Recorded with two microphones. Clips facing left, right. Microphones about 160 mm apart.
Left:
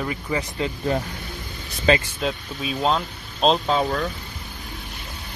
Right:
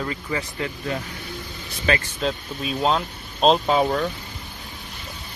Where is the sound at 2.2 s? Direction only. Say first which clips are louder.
Right 1 dB; centre (ahead or behind).